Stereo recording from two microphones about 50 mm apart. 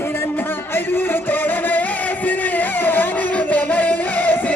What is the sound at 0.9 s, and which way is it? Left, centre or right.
Music, left.